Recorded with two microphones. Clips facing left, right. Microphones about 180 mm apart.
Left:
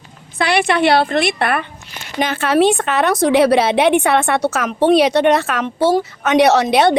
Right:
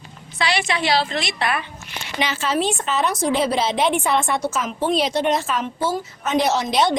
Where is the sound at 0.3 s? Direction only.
60° left (ahead or behind).